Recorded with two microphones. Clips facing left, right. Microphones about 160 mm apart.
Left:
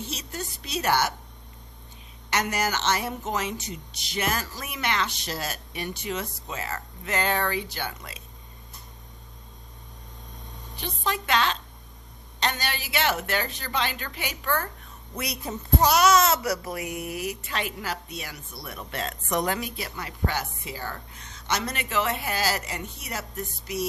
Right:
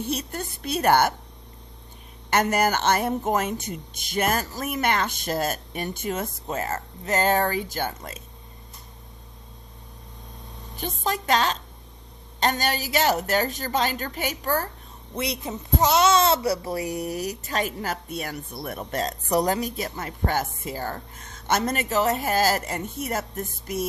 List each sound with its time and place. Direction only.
0.0 s a woman's voice: 55° right (ahead or behind)
2.3 s speech: 50° right (ahead or behind)
10.8 s a woman's voice: 45° right (ahead or behind)
15.1 s speech: 25° right (ahead or behind); by 23.8 s 50° right (ahead or behind)